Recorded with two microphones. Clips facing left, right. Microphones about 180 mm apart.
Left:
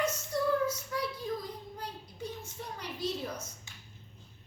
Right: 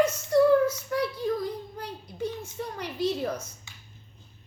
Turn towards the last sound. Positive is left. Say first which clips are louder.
# right 8 dB
turn(degrees=-70)  # may be behind; listen again after turning